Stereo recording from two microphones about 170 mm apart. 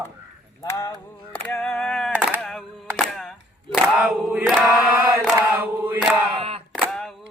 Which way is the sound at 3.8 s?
Centre (ahead or behind).